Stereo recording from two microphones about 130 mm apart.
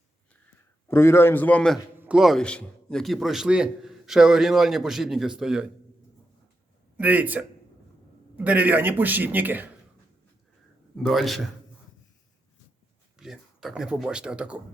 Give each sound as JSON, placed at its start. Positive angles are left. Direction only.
{"t": 0.9, "sound": "a man's voice", "side_deg": 20}
{"t": 2.0, "sound": "a man's voice", "side_deg": -5}
{"t": 6.9, "sound": "a man's voice", "side_deg": -15}
{"t": 8.4, "sound": "a man's voice", "side_deg": -15}
{"t": 10.9, "sound": "a man's voice", "side_deg": 0}
{"t": 13.1, "sound": "speech", "side_deg": -5}